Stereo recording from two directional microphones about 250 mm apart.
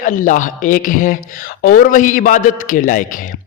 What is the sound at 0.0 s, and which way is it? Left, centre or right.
A man's voice, left.